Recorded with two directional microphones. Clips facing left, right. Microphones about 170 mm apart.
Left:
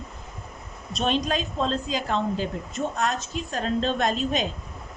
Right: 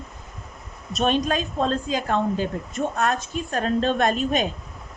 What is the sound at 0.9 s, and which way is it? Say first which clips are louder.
A woman's voice: right 3 dB; 50° right (ahead or behind).